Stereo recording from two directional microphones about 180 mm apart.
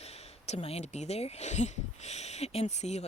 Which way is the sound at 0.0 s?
35° left (ahead or behind).